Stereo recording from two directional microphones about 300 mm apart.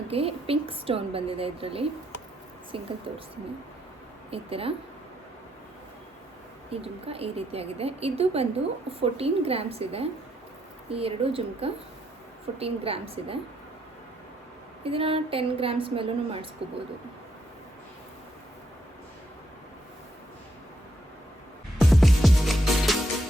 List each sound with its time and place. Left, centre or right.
0.1 s a woman's voice: centre
4.3 s a woman's voice: centre
6.7 s a woman's voice: centre
14.8 s a woman's voice: centre
21.8 s music: centre